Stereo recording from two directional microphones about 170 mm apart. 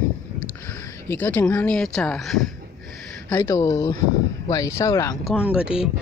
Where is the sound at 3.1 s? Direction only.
15° left (ahead or behind).